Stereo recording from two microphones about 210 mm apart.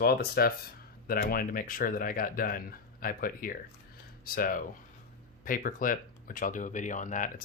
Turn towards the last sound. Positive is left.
turn(degrees=40)  # may be behind; listen again after turning